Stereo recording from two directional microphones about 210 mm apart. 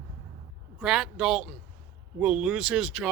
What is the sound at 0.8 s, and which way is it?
Speech, 5° right (ahead or behind).